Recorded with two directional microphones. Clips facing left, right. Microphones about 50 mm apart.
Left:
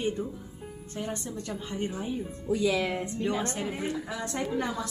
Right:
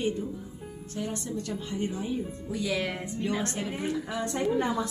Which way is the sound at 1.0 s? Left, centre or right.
Left.